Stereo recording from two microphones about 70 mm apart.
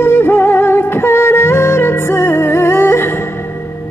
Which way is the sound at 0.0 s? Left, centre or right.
Left.